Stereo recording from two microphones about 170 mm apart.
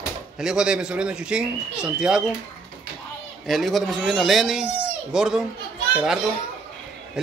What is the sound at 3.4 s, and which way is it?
Speech, centre (ahead or behind).